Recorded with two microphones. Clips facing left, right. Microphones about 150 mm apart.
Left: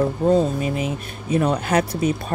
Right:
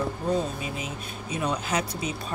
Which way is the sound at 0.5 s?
55° left (ahead or behind).